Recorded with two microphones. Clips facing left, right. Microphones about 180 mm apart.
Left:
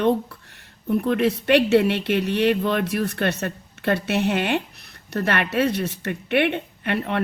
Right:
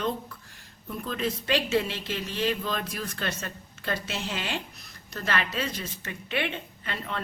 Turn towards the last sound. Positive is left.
turn(degrees=65)  # may be behind; listen again after turning